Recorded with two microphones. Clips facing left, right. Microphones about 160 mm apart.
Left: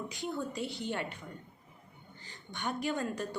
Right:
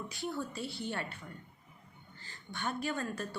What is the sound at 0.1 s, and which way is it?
A woman's voice, 20° left (ahead or behind).